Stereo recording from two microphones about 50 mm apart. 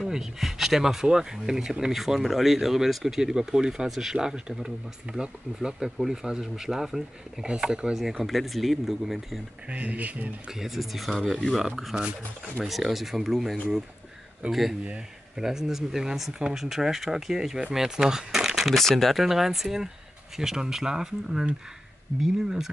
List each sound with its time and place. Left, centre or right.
0.0 s speech: centre
8.2 s speech: centre
9.7 s speech: right
10.5 s speech: centre
11.9 s speech: centre
12.6 s speech: centre
19.2 s speech: centre